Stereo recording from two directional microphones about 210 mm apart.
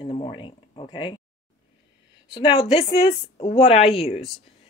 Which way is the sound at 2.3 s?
20° left (ahead or behind).